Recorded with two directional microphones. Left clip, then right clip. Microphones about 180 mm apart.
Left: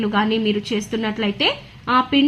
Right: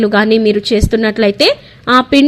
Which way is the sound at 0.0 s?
40° right (ahead or behind).